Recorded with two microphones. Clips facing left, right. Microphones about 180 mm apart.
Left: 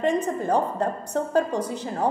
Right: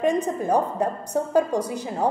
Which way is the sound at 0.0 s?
10° right (ahead or behind).